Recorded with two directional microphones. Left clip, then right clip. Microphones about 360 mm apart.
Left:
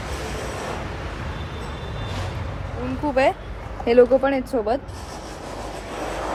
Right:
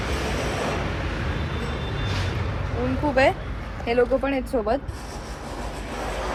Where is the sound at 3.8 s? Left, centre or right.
Left.